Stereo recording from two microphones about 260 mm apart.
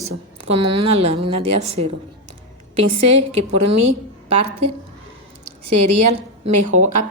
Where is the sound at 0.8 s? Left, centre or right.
Right.